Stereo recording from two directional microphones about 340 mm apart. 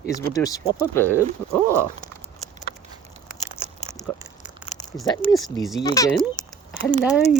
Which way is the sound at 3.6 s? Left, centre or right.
Centre.